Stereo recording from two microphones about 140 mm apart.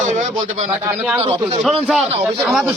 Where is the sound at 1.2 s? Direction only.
45° right (ahead or behind).